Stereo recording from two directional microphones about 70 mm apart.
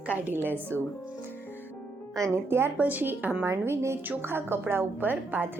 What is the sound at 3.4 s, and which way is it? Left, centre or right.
A woman's voice, right.